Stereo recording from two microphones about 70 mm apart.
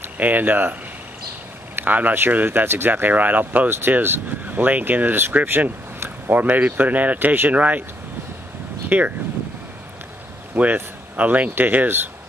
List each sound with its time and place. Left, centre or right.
0.0 s speech: right
1.8 s speech: right
8.8 s speech: right
10.5 s speech: right